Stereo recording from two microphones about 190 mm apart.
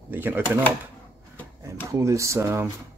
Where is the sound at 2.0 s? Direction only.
15° right (ahead or behind).